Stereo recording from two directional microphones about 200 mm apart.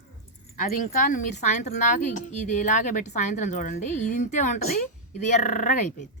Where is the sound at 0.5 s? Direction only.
40° left (ahead or behind).